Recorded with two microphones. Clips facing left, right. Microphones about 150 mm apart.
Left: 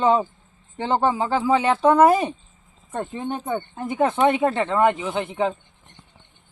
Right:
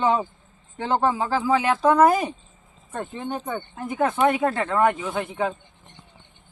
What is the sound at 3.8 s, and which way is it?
Speech, 25° left (ahead or behind).